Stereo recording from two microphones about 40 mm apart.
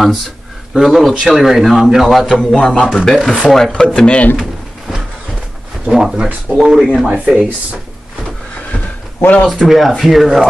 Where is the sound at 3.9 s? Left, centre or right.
Left.